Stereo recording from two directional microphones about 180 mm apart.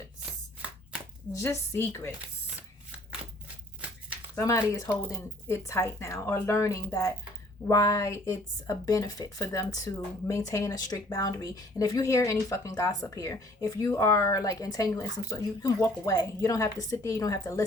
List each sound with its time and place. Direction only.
1.3 s speech: 15° left (ahead or behind)
4.4 s speech: 15° left (ahead or behind)